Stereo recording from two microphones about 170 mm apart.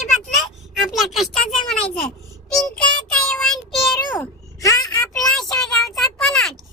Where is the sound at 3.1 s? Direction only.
5° left (ahead or behind).